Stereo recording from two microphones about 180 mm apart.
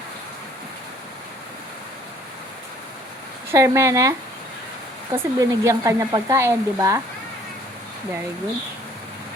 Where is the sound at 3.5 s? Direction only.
15° right (ahead or behind).